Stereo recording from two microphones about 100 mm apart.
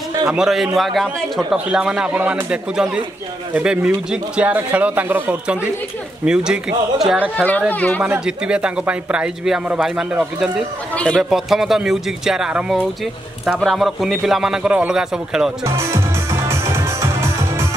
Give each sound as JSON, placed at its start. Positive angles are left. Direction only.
{"t": 0.3, "sound": "a man's voice", "side_deg": -5}
{"t": 7.3, "sound": "speech", "side_deg": 15}
{"t": 8.0, "sound": "a man's voice", "side_deg": -10}
{"t": 15.6, "sound": "music", "side_deg": -30}